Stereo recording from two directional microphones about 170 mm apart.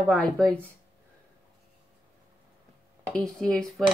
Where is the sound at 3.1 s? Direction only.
Centre (ahead or behind).